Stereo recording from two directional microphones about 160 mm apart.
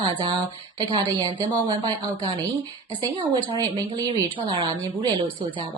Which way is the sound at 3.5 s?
25° right (ahead or behind).